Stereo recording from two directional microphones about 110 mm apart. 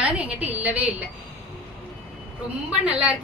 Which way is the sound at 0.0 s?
15° right (ahead or behind).